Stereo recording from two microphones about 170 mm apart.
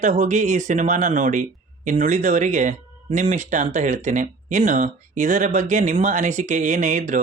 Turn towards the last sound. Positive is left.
turn(degrees=-45)  # may be behind; listen again after turning